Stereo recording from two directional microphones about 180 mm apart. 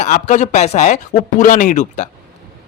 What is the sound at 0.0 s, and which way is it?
Speech, 45° left (ahead or behind).